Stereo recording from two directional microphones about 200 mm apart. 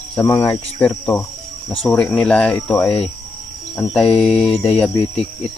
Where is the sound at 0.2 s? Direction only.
10° left (ahead or behind).